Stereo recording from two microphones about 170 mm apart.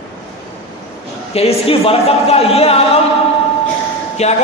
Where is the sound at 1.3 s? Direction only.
35° left (ahead or behind).